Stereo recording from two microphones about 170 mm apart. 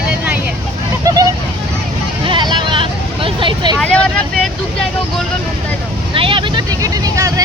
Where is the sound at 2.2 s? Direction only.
30° right (ahead or behind).